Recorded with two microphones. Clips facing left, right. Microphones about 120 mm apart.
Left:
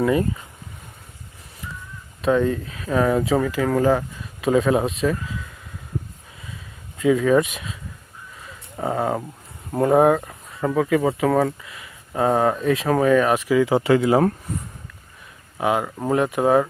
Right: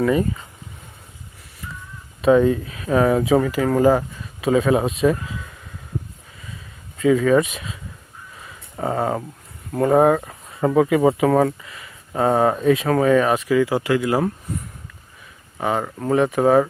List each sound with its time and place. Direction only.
2.2 s speech: 10° right (ahead or behind)
7.0 s speech: centre (ahead or behind)
11.4 s speech: 5° left (ahead or behind)
13.3 s speech: 15° left (ahead or behind)
15.5 s speech: 5° left (ahead or behind)